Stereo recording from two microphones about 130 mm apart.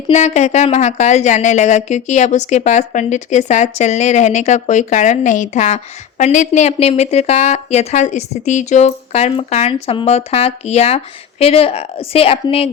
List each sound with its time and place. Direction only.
0.1 s speech: 60° left (ahead or behind)